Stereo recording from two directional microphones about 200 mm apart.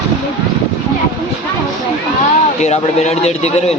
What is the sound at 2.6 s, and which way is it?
A man's voice, 35° left (ahead or behind).